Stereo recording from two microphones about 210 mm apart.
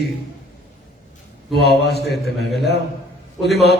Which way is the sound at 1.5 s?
50° left (ahead or behind).